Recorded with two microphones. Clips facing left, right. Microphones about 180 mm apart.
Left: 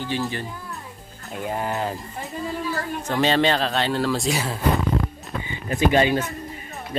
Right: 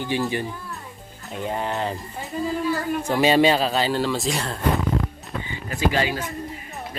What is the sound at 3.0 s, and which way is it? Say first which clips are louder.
Speech: right 2 dB; 10° right (ahead or behind).